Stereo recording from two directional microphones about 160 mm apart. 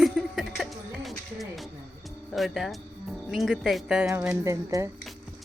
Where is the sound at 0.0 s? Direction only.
Centre (ahead or behind).